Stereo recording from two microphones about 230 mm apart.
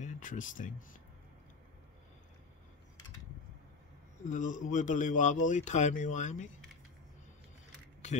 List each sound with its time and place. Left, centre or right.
0.0 s speech: left
4.3 s a man's voice: left